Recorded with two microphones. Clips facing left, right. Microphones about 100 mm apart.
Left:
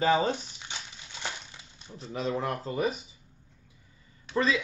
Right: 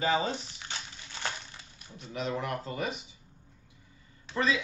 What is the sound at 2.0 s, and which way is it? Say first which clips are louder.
A man's voice: left 3 dB; 35° left (ahead or behind).